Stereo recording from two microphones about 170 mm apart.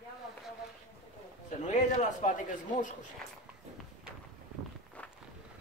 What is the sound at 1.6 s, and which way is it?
Speech, 45° left (ahead or behind).